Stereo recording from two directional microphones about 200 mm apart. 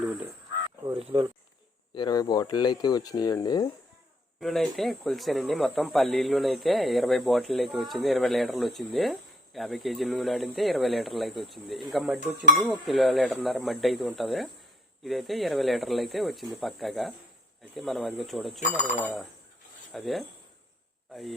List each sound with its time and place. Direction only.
0.9 s speech: 25° right (ahead or behind)
1.9 s speech: 20° left (ahead or behind)
4.4 s speech: centre (ahead or behind)